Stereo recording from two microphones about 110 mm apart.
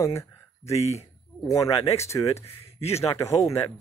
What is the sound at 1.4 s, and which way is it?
Speech, 30° left (ahead or behind).